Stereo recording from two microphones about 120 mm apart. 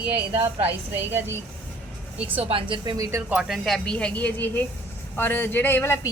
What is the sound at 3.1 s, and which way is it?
A woman's voice, 15° right (ahead or behind).